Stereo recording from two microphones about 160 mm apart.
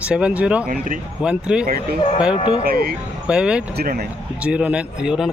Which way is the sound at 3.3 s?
5° right (ahead or behind).